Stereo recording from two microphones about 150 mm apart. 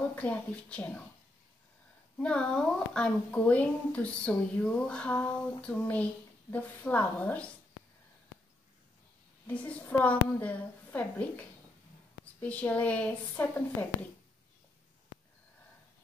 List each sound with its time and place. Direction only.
0.1 s a woman's voice: 10° left (ahead or behind)
2.1 s a woman's voice: 5° left (ahead or behind)
9.5 s a woman's voice: 10° left (ahead or behind)